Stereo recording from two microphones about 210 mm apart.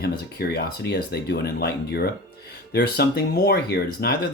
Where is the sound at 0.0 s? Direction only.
50° left (ahead or behind).